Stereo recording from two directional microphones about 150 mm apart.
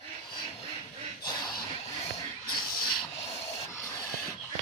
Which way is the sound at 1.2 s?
30° left (ahead or behind).